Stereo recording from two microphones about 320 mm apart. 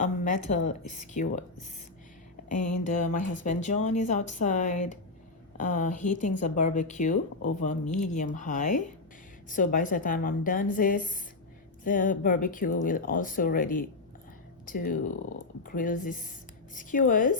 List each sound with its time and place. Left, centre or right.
0.0 s speech: left
2.8 s speech: left